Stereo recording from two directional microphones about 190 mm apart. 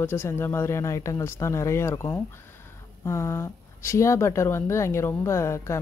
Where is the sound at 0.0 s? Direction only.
10° left (ahead or behind).